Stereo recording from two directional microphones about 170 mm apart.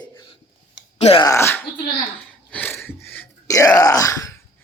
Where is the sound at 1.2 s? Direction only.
15° left (ahead or behind).